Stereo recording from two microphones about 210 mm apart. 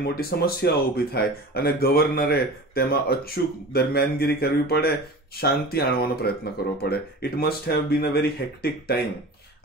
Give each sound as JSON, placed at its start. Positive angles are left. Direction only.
{"t": 0.0, "sound": "speech", "side_deg": 45}